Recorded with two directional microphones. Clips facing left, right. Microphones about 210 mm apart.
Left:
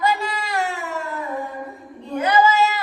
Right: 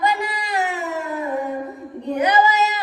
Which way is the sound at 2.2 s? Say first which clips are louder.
Left 1 dB; 20° right (ahead or behind).